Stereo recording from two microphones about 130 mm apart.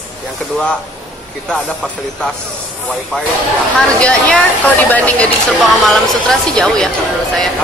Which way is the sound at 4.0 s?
10° left (ahead or behind).